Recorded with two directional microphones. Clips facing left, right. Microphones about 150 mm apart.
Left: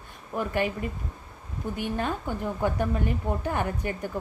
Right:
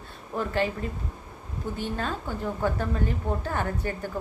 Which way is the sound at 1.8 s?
15° left (ahead or behind).